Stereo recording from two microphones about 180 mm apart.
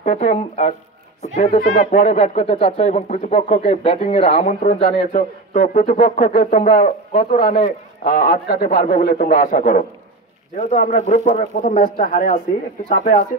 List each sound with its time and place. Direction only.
0.0 s speech: 45° left (ahead or behind)